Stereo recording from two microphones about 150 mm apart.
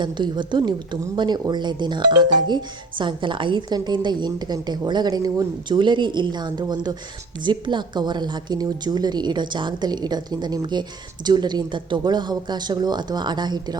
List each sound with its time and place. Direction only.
0.0 s a woman's voice: 30° right (ahead or behind)